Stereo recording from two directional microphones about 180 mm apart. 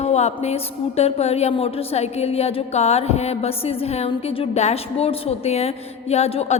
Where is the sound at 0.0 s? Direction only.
35° left (ahead or behind).